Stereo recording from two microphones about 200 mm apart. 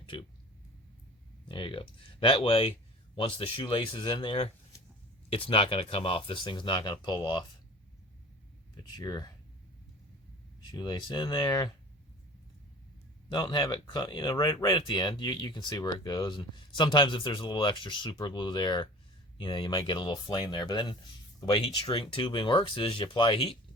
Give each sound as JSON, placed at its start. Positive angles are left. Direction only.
{"t": 0.0, "sound": "speech", "side_deg": 25}
{"t": 1.5, "sound": "speech", "side_deg": 25}
{"t": 8.7, "sound": "speech", "side_deg": 20}
{"t": 10.7, "sound": "speech", "side_deg": 20}
{"t": 13.3, "sound": "speech", "side_deg": 20}